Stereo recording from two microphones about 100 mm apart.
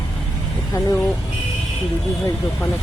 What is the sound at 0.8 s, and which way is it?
Speech, 30° left (ahead or behind).